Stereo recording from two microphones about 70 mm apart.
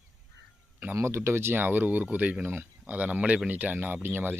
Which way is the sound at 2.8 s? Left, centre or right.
Right.